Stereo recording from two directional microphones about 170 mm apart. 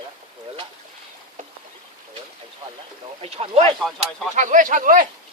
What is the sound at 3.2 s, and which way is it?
Speech, 35° right (ahead or behind).